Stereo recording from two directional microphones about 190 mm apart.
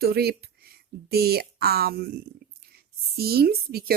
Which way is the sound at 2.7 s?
55° right (ahead or behind).